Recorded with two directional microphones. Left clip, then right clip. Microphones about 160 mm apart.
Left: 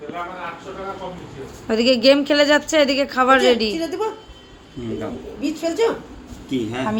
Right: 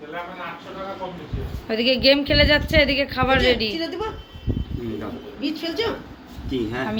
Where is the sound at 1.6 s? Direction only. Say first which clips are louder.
Left 3 dB; 35° left (ahead or behind).